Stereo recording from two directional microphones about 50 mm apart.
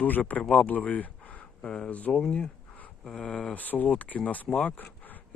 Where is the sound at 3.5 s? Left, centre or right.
Left.